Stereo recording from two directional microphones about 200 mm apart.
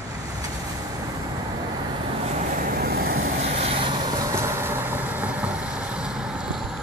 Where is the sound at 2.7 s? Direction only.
50° right (ahead or behind).